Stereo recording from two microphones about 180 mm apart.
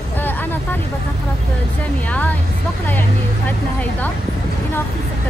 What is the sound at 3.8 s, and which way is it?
Speech, 10° left (ahead or behind).